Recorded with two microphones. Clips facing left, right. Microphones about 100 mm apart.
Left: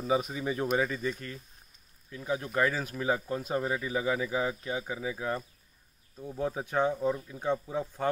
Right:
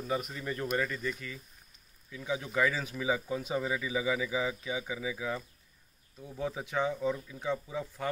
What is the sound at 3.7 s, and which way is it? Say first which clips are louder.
Speech: left 1 dB; 40° left (ahead or behind).